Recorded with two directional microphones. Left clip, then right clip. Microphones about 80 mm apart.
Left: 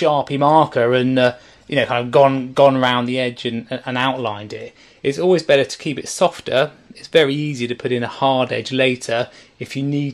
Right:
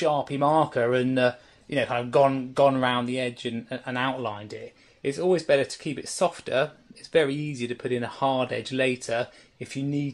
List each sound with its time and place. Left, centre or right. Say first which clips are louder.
0.0 s speech: left 8 dB; left